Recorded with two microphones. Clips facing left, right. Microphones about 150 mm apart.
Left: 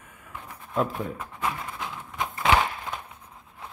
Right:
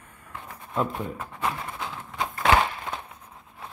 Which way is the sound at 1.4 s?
20° right (ahead or behind).